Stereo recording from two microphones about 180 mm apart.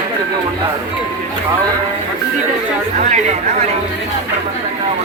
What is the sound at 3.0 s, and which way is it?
Speech, 40° right (ahead or behind).